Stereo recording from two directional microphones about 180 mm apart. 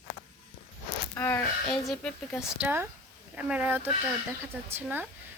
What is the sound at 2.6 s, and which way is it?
Speech, 10° right (ahead or behind).